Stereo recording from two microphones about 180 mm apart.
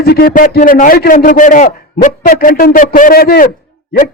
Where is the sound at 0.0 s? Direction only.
55° left (ahead or behind).